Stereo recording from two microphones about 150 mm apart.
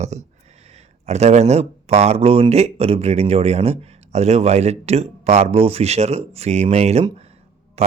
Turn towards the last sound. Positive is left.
turn(degrees=-45)  # may be behind; listen again after turning